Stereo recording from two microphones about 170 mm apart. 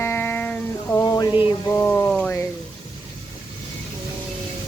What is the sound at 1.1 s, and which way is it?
Music, 20° left (ahead or behind).